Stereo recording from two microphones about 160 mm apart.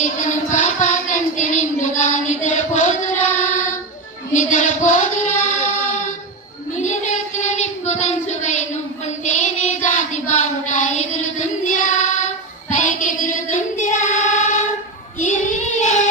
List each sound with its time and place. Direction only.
0.0 s child singing: 50° left (ahead or behind)
4.3 s music: 50° left (ahead or behind)
6.7 s child singing: 45° left (ahead or behind)
12.7 s choir: 50° left (ahead or behind)
15.2 s child singing: 55° left (ahead or behind)